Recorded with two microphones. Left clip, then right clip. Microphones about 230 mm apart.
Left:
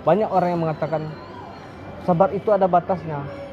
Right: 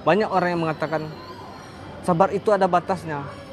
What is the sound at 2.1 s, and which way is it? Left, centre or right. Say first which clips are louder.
A man's voice: left 1 dB; right.